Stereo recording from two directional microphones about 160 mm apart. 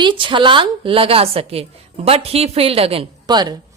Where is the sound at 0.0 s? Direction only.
30° right (ahead or behind).